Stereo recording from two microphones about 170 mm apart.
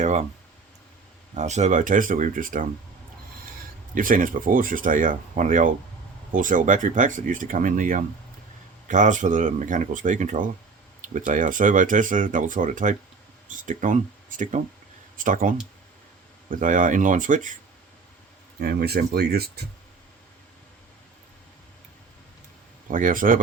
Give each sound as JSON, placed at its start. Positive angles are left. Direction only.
{"t": 0.0, "sound": "speech", "side_deg": -45}
{"t": 1.4, "sound": "speech", "side_deg": -45}
{"t": 3.9, "sound": "speech", "side_deg": -50}
{"t": 18.6, "sound": "speech", "side_deg": -65}
{"t": 22.9, "sound": "speech", "side_deg": -50}